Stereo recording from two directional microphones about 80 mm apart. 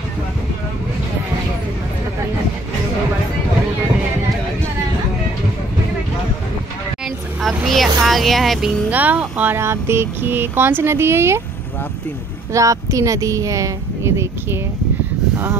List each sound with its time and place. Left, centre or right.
7.4 s vehicle: centre
8.9 s speech: centre
9.6 s speech: right
12.5 s speech: right